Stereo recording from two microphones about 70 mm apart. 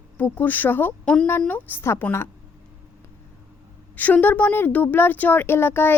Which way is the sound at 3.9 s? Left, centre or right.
Left.